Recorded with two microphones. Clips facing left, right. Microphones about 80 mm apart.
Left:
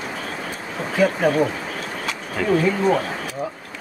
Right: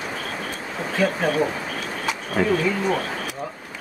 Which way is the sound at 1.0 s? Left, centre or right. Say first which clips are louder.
Left 3 dB; centre.